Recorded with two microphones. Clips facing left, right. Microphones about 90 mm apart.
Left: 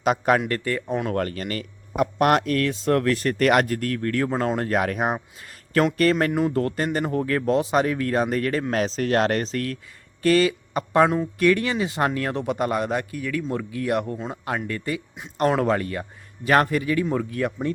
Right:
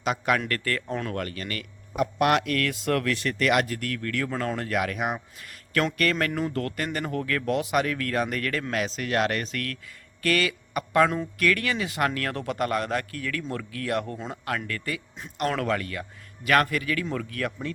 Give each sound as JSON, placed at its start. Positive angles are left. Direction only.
{"t": 0.0, "sound": "speech", "side_deg": 45}
{"t": 0.3, "sound": "speech", "side_deg": 20}
{"t": 1.1, "sound": "speech", "side_deg": 35}
{"t": 6.3, "sound": "speech", "side_deg": 15}
{"t": 6.6, "sound": "speech", "side_deg": 25}